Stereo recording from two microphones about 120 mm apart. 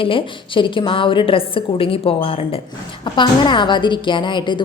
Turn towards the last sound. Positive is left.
turn(degrees=40)  # may be behind; listen again after turning